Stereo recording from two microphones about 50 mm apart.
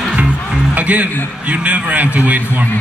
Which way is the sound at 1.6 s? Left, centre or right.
Right.